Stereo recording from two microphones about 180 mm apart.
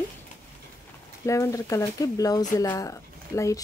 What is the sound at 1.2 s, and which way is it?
Speech, 15° left (ahead or behind).